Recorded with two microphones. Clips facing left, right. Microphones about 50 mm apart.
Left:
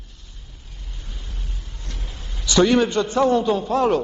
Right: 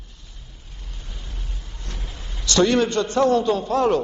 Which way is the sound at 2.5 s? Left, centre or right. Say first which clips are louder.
Left 2 dB; centre.